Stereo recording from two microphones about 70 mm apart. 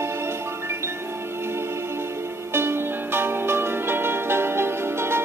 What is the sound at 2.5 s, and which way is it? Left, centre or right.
Music, right.